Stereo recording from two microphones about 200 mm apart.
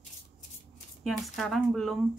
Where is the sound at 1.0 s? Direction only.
Centre (ahead or behind).